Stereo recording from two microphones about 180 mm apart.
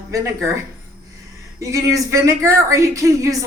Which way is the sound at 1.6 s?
15° right (ahead or behind).